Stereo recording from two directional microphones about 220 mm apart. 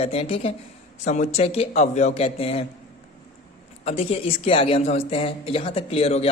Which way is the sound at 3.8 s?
25° left (ahead or behind).